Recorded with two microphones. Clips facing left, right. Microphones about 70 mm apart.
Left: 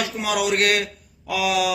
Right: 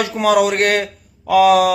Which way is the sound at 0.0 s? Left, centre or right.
Right.